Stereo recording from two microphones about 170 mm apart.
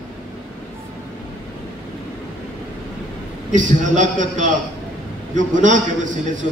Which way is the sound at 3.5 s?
45° right (ahead or behind).